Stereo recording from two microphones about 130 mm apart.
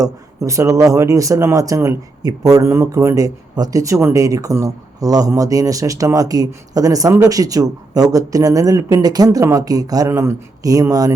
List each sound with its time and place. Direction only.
0.0 s speech: 25° right (ahead or behind)